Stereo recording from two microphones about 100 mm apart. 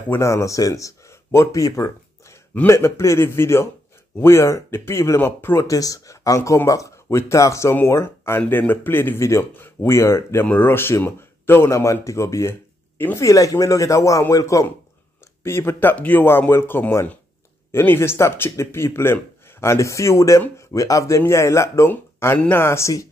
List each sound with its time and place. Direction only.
0.1 s speech: 30° left (ahead or behind)
10.4 s speech: 20° left (ahead or behind)